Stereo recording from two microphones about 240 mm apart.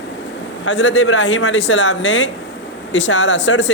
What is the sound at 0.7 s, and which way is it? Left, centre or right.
Speech, left.